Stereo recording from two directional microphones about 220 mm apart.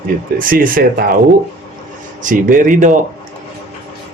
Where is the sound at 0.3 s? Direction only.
40° right (ahead or behind).